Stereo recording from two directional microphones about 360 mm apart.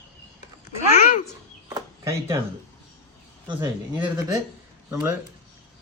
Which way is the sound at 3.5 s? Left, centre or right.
Centre.